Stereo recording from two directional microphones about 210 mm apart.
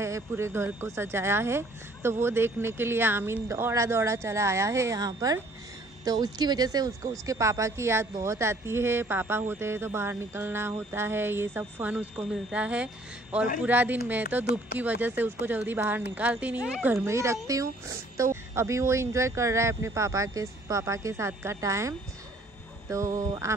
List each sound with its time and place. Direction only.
0.0 s speech: 15° right (ahead or behind)